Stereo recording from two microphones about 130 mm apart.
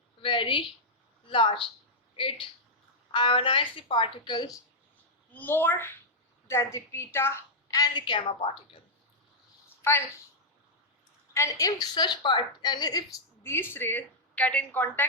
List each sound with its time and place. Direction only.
0.2 s speech: 40° left (ahead or behind)
5.3 s a woman's voice: 15° left (ahead or behind); by 8.4 s 35° left (ahead or behind)
9.8 s a woman's voice: 20° left (ahead or behind)
11.3 s a woman's voice: 25° left (ahead or behind)